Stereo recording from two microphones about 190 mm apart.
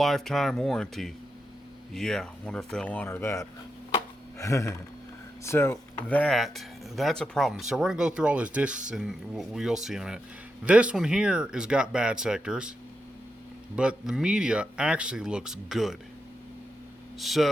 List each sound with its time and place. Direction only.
0.0 s speech: centre (ahead or behind)
13.7 s speech: 5° right (ahead or behind)
17.2 s speech: centre (ahead or behind)